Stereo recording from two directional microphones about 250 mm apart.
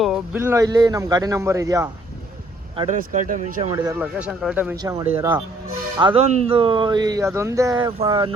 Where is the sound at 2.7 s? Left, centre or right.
Right.